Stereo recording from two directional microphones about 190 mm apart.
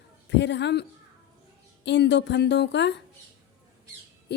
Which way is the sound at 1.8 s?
65° left (ahead or behind).